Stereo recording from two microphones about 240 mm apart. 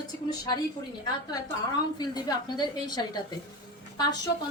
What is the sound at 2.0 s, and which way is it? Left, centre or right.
A woman's voice, centre.